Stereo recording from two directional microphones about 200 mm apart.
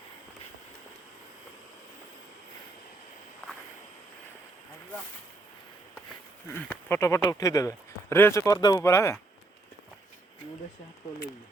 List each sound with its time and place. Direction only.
6.5 s speech: 10° left (ahead or behind)